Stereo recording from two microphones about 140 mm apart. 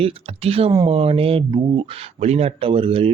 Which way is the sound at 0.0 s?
45° right (ahead or behind).